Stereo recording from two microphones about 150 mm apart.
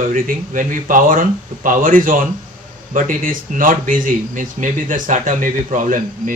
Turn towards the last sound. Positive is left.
turn(degrees=-60)  # may be behind; listen again after turning